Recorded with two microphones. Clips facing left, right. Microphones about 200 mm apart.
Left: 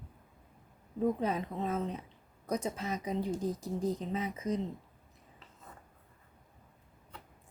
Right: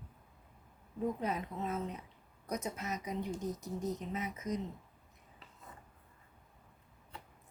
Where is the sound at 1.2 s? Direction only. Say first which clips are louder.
Left 4 dB; 30° left (ahead or behind).